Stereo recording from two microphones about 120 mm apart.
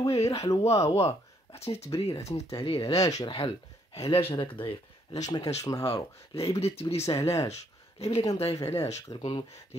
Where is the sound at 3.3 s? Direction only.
60° left (ahead or behind).